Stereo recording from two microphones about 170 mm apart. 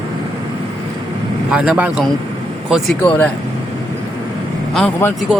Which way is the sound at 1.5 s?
5° right (ahead or behind).